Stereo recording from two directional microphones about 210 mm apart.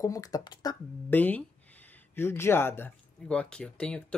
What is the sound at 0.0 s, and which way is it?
Speech, 15° left (ahead or behind).